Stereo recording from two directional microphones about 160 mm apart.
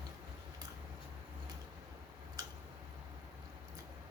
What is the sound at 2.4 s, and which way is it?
Tick-tock, 25° right (ahead or behind).